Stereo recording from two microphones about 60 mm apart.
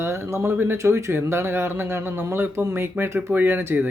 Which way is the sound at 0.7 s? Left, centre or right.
Right.